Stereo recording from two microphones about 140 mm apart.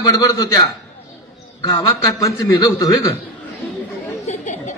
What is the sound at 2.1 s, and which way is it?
Speech, 25° left (ahead or behind).